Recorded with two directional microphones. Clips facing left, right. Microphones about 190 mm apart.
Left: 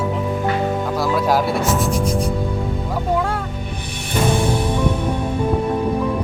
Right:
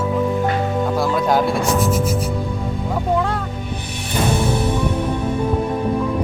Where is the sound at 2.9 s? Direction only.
5° left (ahead or behind).